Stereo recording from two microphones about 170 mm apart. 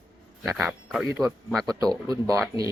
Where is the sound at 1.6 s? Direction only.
20° right (ahead or behind).